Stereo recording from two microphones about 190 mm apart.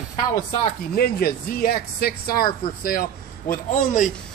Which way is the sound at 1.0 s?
55° left (ahead or behind).